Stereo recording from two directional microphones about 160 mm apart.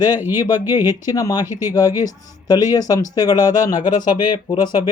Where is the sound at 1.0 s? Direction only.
20° left (ahead or behind).